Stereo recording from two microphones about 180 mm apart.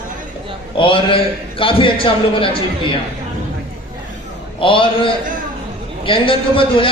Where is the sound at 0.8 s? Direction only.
30° left (ahead or behind).